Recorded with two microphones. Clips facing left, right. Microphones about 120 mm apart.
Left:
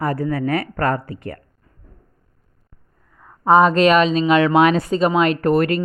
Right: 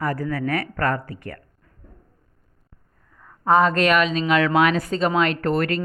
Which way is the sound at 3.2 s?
20° left (ahead or behind).